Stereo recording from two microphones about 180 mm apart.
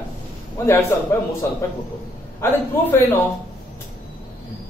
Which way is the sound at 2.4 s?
15° left (ahead or behind).